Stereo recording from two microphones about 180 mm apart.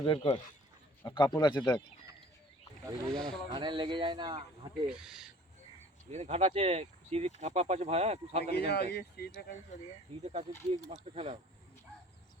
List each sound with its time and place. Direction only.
0.0 s speech: 30° left (ahead or behind)
3.1 s speech: 5° left (ahead or behind)
3.5 s speech: 25° right (ahead or behind)
4.9 s speech: 5° right (ahead or behind)
6.1 s speech: 40° right (ahead or behind)
8.5 s speech: 65° left (ahead or behind)
10.7 s speech: 35° right (ahead or behind)